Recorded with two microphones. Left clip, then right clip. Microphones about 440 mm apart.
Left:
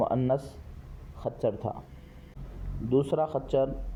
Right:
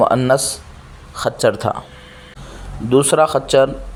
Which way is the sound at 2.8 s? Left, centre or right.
Centre.